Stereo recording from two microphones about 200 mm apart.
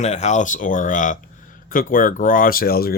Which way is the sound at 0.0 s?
35° left (ahead or behind).